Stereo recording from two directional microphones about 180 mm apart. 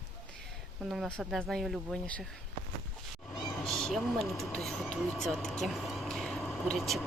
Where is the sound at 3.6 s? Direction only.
Centre (ahead or behind).